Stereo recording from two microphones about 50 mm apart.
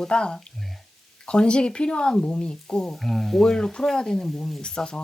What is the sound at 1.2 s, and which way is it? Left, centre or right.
Speech, centre.